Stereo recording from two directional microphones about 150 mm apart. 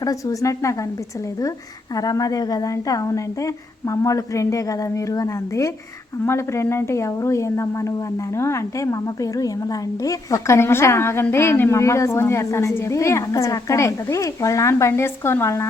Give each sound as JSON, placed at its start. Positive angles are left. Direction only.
{"t": 0.0, "sound": "a woman's voice", "side_deg": 25}
{"t": 2.0, "sound": "a woman's voice", "side_deg": 25}